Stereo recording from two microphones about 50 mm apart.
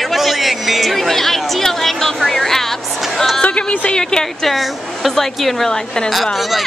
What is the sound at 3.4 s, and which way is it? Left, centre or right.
A woman's voice, left.